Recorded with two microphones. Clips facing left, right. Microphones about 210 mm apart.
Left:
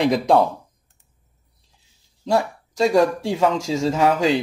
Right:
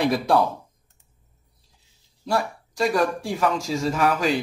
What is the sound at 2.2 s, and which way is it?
Speech, 25° left (ahead or behind).